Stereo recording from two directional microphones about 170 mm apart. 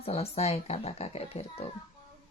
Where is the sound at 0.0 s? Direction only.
35° left (ahead or behind).